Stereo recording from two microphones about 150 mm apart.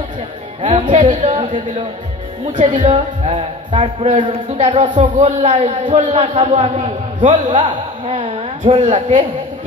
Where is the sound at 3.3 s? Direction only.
35° right (ahead or behind); by 6.3 s 55° right (ahead or behind).